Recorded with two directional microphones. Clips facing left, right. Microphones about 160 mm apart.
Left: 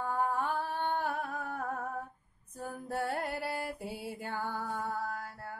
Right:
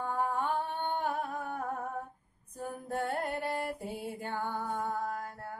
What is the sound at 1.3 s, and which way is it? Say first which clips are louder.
Humming: right 1 dB; 30° right (ahead or behind).